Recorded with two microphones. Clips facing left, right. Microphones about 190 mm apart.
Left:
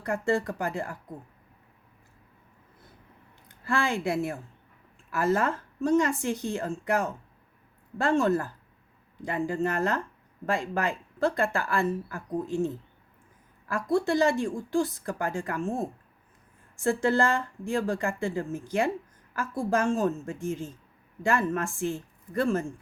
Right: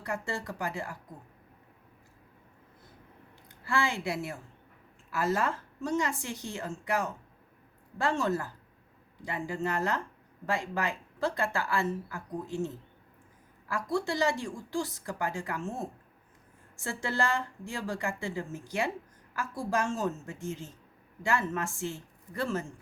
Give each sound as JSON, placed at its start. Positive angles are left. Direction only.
{"t": 0.0, "sound": "speech", "side_deg": 55}
{"t": 3.7, "sound": "speech", "side_deg": 55}
{"t": 16.7, "sound": "speech", "side_deg": 55}